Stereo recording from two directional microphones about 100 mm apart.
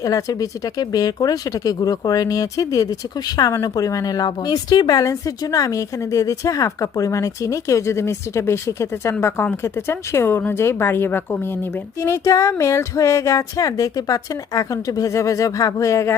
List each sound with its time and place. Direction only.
0.0 s a woman's voice: 35° left (ahead or behind)